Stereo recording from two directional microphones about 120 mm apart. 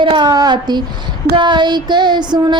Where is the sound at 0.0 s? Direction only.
40° right (ahead or behind).